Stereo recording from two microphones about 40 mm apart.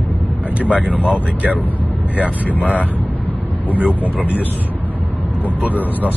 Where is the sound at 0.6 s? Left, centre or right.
Right.